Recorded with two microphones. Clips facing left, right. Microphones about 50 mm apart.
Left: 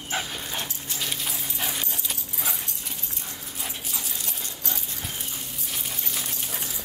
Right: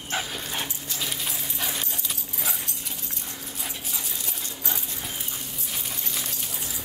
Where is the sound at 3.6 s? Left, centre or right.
Centre.